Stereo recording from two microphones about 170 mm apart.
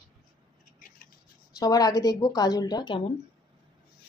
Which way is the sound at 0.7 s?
55° left (ahead or behind).